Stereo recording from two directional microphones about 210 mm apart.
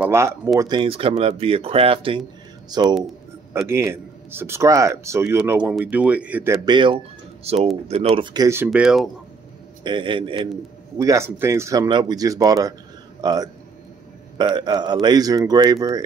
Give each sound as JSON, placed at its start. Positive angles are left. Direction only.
{"t": 0.0, "sound": "speech", "side_deg": -10}
{"t": 6.6, "sound": "speech", "side_deg": -20}
{"t": 8.2, "sound": "speech", "side_deg": -20}
{"t": 8.6, "sound": "speech", "side_deg": 0}
{"t": 9.8, "sound": "speech", "side_deg": -25}